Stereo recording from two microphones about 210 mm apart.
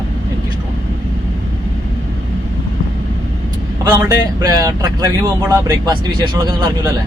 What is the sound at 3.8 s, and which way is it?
Speech, 20° right (ahead or behind).